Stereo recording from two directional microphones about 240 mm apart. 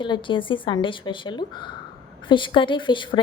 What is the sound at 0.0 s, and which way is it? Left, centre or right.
A woman's voice, centre.